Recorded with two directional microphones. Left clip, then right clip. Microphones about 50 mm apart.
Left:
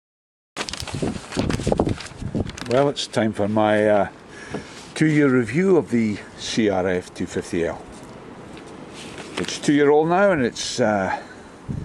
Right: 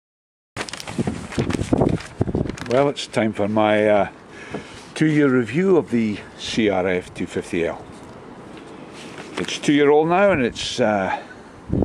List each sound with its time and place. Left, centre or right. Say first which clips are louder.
0.6 s a sound: even; right
2.8 s speech: right 1 dB; centre
9.5 s speech: right 1 dB; centre